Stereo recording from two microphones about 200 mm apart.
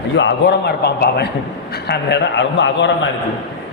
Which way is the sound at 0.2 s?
55° left (ahead or behind).